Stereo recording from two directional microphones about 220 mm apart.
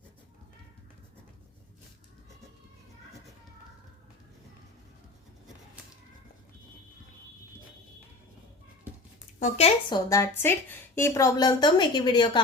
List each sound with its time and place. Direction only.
9.4 s speech: 25° left (ahead or behind)
10.1 s a woman's voice: 10° left (ahead or behind)